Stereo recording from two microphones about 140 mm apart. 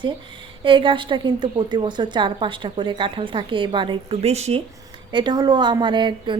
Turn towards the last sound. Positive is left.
turn(degrees=-35)  # may be behind; listen again after turning